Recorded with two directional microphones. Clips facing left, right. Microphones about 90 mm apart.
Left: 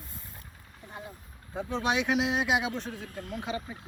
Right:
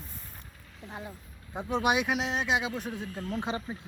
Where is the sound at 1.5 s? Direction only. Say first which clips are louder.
Right 2 dB; 15° right (ahead or behind); by 2.7 s 5° left (ahead or behind).